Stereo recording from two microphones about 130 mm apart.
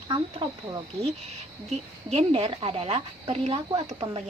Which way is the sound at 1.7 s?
50° right (ahead or behind).